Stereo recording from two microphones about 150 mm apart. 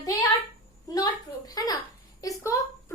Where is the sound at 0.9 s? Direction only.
25° left (ahead or behind).